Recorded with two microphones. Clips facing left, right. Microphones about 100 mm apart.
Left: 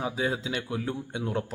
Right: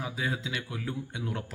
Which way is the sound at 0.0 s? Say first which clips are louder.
Left 4 dB; 30° left (ahead or behind).